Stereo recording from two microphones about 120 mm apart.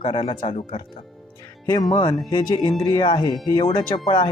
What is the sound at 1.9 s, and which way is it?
Speech, 40° left (ahead or behind).